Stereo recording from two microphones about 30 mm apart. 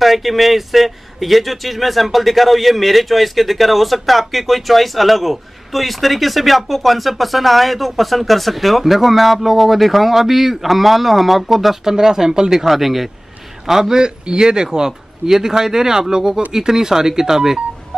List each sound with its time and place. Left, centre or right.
0.0 s speech: centre
11.8 s a man's voice: centre
12.6 s speech: centre
13.7 s a man's voice: centre